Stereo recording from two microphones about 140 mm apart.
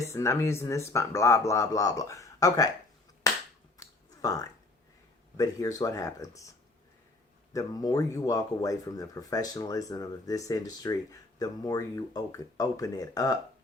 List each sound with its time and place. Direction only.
0.0 s speech: 20° left (ahead or behind)
3.8 s a sound: 25° left (ahead or behind)
5.4 s speech: 25° left (ahead or behind)
7.5 s speech: 25° left (ahead or behind)